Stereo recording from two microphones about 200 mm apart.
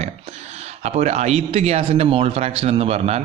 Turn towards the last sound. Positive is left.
turn(degrees=-30)  # may be behind; listen again after turning